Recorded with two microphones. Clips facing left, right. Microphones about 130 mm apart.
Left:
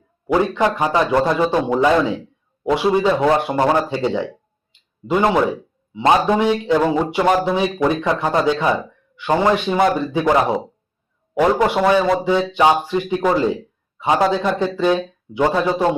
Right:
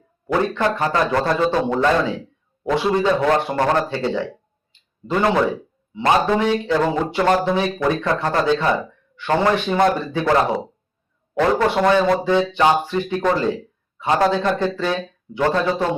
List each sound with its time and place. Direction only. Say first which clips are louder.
0.3 s speech: left 2 dB; 15° left (ahead or behind)
11.3 s speech: left 2 dB; 15° left (ahead or behind)